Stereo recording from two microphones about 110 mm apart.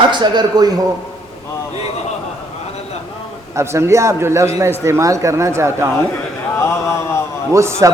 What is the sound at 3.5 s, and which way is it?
A man's voice, 25° right (ahead or behind).